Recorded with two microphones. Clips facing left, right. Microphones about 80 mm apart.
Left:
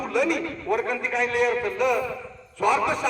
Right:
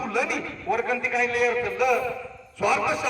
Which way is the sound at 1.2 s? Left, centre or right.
Left.